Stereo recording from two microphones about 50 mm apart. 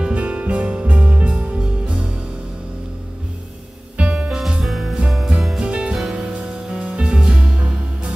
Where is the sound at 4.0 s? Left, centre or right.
Right.